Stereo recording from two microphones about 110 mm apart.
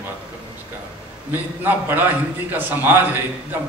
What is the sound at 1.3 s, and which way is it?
A man's voice, 20° right (ahead or behind).